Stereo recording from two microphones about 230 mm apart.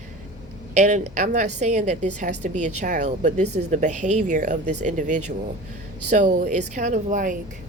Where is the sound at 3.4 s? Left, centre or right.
Right.